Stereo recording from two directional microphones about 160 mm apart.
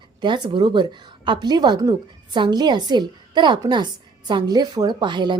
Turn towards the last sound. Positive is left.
turn(degrees=-30)  # may be behind; listen again after turning